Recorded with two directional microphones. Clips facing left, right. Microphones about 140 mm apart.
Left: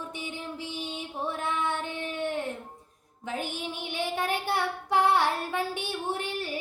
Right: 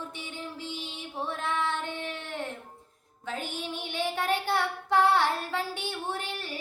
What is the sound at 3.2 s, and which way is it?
Child singing, 15° left (ahead or behind).